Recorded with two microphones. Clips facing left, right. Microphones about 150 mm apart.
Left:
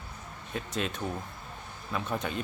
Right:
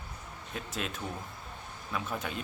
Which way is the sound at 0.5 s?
Centre (ahead or behind).